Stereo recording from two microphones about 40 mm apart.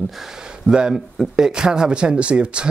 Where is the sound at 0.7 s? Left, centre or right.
Right.